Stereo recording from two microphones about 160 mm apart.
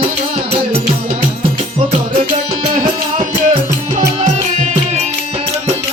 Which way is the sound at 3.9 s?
50° right (ahead or behind).